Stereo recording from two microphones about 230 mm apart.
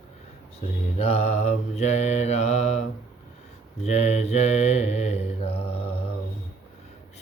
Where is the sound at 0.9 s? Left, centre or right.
Left.